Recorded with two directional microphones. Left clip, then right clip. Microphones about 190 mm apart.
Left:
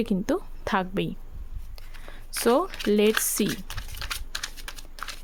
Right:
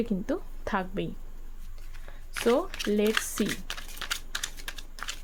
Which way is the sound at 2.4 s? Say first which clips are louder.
Left 3 dB; 30° left (ahead or behind).